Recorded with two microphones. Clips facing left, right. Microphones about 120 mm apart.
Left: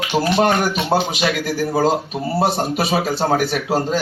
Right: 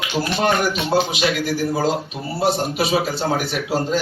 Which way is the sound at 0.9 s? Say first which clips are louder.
Even; 45° left (ahead or behind).